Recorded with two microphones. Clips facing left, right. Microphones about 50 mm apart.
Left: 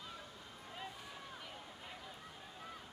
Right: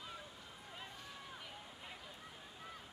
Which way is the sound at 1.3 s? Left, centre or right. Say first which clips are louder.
Left 1 dB; centre.